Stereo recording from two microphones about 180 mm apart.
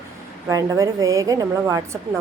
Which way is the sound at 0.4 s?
20° right (ahead or behind).